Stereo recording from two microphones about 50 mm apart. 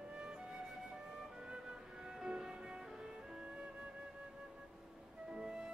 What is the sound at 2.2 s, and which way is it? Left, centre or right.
Music, centre.